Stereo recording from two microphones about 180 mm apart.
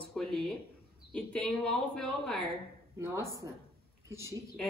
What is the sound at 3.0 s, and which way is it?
A woman's voice, 15° right (ahead or behind).